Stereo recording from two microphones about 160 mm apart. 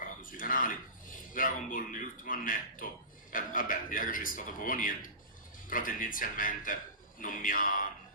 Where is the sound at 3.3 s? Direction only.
60° left (ahead or behind).